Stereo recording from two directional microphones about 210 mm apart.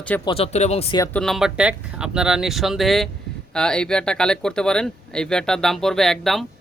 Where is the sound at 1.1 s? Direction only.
Centre (ahead or behind).